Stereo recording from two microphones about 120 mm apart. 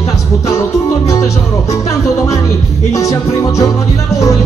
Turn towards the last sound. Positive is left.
turn(degrees=25)  # may be behind; listen again after turning